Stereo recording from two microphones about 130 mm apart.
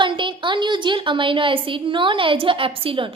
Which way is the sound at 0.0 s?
40° right (ahead or behind).